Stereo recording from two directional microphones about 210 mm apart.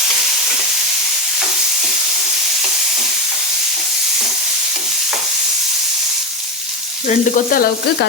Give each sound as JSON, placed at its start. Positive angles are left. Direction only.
{"t": 7.1, "sound": "sizzle", "side_deg": 40}